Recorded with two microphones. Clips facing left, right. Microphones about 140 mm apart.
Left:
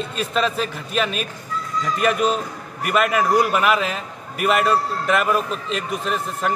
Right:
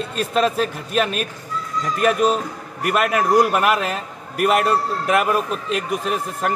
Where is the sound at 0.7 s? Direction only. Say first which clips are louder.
Right 2 dB; 50° right (ahead or behind).